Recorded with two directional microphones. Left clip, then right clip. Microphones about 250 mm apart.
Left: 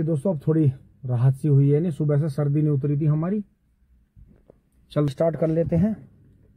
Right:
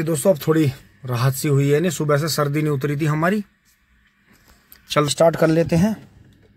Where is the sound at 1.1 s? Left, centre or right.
Centre.